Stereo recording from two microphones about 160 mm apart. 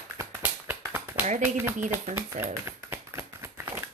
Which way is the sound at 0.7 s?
10° right (ahead or behind).